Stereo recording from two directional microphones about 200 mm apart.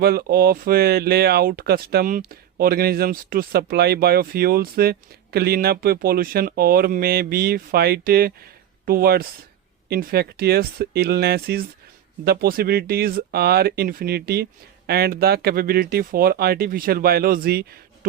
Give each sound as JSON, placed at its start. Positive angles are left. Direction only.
{"t": 0.0, "sound": "speech", "side_deg": -50}